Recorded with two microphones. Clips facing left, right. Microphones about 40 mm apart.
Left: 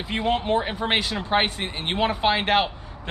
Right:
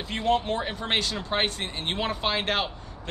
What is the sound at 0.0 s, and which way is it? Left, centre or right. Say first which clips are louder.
Speech: left 1 dB; centre.